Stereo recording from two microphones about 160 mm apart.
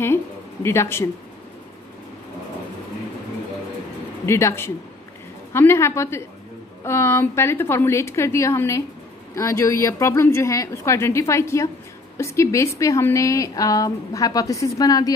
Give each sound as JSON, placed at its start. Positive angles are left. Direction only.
{"t": 0.0, "sound": "speech", "side_deg": 15}
{"t": 4.3, "sound": "a woman's voice", "side_deg": 15}